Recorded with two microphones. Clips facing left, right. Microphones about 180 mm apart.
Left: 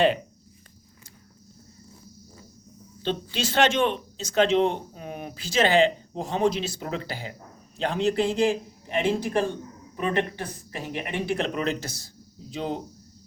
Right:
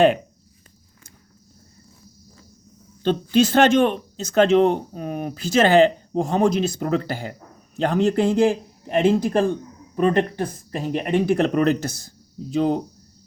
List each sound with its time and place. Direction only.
3.0 s speech: 50° right (ahead or behind)